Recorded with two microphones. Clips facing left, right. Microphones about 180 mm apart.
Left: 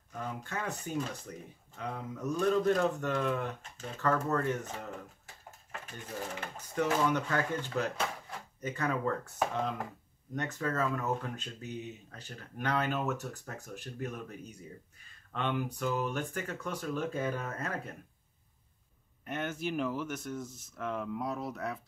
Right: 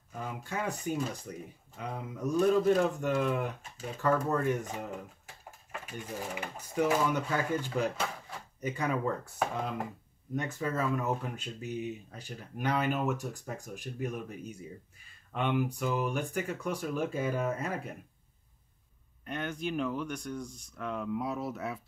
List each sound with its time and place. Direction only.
0.1 s speech: 10° right (ahead or behind)
19.2 s speech: 5° left (ahead or behind)